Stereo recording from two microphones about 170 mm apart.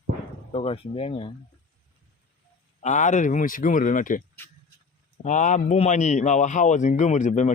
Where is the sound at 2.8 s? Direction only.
45° left (ahead or behind).